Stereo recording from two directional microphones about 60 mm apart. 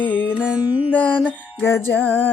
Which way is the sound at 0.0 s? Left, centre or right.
Left.